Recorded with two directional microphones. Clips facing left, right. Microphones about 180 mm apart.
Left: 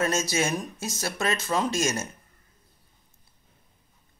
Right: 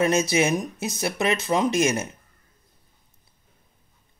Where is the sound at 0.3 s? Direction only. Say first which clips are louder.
Right 5 dB; 20° right (ahead or behind).